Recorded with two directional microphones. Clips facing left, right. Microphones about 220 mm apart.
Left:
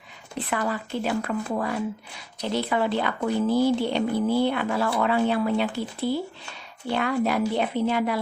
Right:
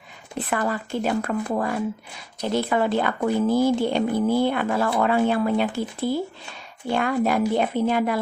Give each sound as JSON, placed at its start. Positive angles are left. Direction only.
{"t": 0.5, "sound": "a woman's voice", "side_deg": -50}